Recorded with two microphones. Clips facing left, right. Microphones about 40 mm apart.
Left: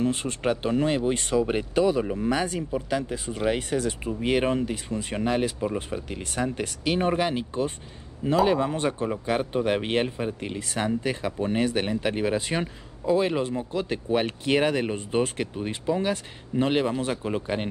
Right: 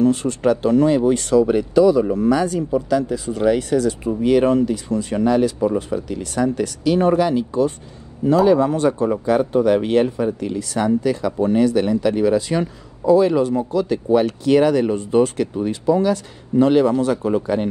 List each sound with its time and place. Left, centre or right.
0.0 s speech: left